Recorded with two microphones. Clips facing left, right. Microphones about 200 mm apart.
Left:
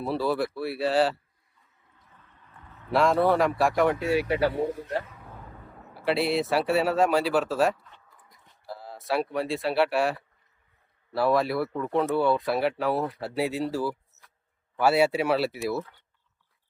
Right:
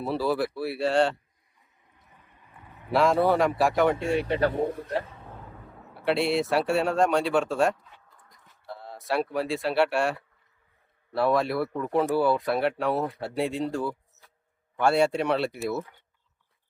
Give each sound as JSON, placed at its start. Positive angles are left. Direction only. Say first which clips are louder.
{"t": 0.0, "sound": "speech", "louder": "even", "side_deg": 0}
{"t": 1.9, "sound": "a sound", "louder": "even", "side_deg": -15}
{"t": 2.9, "sound": "speech", "louder": "even", "side_deg": 0}
{"t": 4.5, "sound": "a man's voice", "louder": "right 1 dB", "side_deg": -50}
{"t": 5.0, "sound": "a sound", "louder": "right 2 dB", "side_deg": -25}
{"t": 5.3, "sound": "speech", "louder": "right 1 dB", "side_deg": 0}
{"t": 8.1, "sound": "a sound", "louder": "even", "side_deg": 5}
{"t": 8.6, "sound": "speech", "louder": "even", "side_deg": 0}
{"t": 15.7, "sound": "speech", "louder": "left 1 dB", "side_deg": -15}